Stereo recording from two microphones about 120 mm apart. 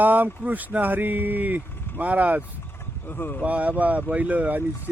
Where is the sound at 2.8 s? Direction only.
20° left (ahead or behind).